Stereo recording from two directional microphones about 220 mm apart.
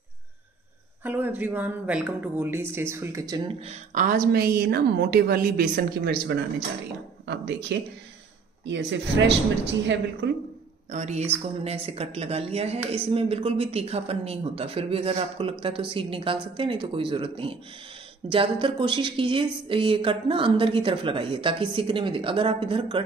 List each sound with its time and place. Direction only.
1.0 s a woman's voice: 10° right (ahead or behind); by 9.9 s 55° right (ahead or behind)
10.9 s speech: 30° right (ahead or behind)